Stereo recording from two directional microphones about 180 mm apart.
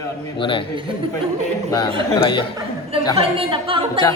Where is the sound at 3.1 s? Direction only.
30° right (ahead or behind).